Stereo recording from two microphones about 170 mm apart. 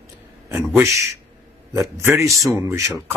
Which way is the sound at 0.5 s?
15° right (ahead or behind).